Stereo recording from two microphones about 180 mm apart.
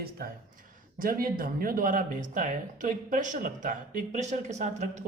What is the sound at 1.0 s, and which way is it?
Speech, 50° right (ahead or behind).